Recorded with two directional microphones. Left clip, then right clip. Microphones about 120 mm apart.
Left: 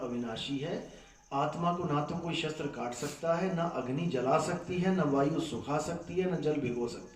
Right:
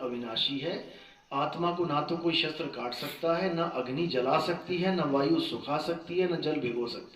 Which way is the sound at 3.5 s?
30° right (ahead or behind).